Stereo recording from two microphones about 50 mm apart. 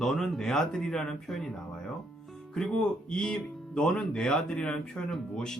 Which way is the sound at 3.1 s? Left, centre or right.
Centre.